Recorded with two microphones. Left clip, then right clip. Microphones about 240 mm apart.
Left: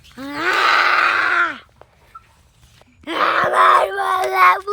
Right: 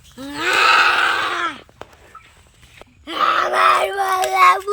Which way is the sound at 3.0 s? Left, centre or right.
Left.